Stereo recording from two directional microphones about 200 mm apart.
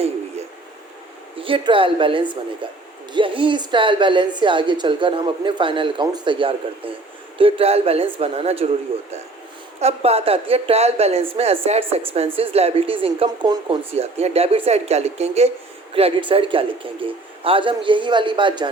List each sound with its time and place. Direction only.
1.4 s speech: 25° right (ahead or behind)
9.8 s speech: 30° right (ahead or behind)